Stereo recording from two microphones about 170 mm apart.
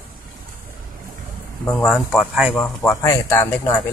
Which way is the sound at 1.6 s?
5° left (ahead or behind).